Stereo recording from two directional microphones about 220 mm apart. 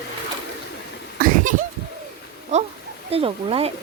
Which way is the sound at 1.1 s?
40° right (ahead or behind).